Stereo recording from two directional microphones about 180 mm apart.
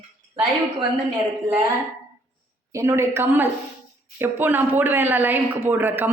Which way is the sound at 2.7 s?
15° right (ahead or behind).